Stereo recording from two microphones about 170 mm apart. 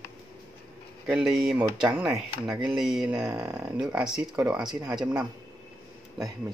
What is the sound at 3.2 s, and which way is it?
Speech, 20° right (ahead or behind).